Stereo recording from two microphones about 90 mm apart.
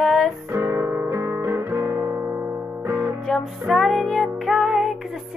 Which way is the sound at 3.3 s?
Centre (ahead or behind).